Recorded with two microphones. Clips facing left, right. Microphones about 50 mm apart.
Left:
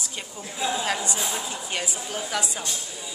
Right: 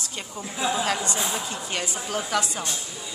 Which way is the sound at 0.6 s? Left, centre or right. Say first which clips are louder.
Right 2 dB; centre.